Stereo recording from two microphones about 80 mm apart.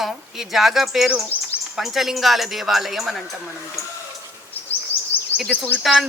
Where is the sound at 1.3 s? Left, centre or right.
Left.